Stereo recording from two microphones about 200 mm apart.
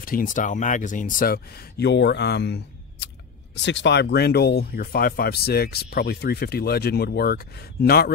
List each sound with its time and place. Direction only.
0.0 s speech: 45° left (ahead or behind)